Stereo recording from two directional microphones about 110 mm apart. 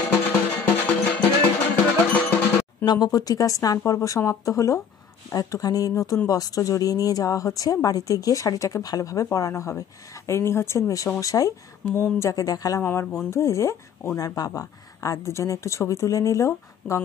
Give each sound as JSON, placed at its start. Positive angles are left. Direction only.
{"t": 0.1, "sound": "music", "side_deg": 15}
{"t": 2.8, "sound": "speech", "side_deg": 40}
{"t": 12.8, "sound": "speech", "side_deg": 20}